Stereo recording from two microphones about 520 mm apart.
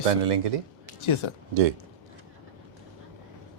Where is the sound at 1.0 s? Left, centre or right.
Left.